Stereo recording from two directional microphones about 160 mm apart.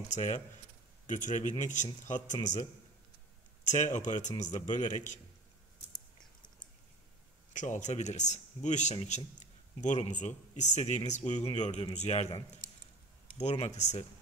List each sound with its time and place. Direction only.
0.1 s speech: 45° left (ahead or behind)
3.6 s speech: 50° left (ahead or behind)
7.5 s speech: 50° left (ahead or behind)